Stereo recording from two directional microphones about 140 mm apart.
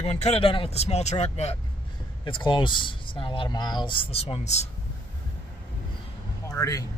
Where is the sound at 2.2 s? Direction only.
35° left (ahead or behind).